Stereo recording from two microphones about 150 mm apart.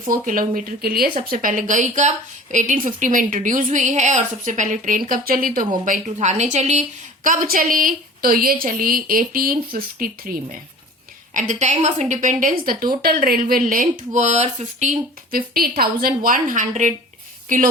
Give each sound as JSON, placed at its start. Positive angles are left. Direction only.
{"t": 0.1, "sound": "a woman's voice", "side_deg": -65}
{"t": 5.8, "sound": "speech", "side_deg": -55}
{"t": 7.3, "sound": "speech", "side_deg": -70}
{"t": 11.3, "sound": "a woman's voice", "side_deg": -55}
{"t": 13.0, "sound": "speech", "side_deg": -85}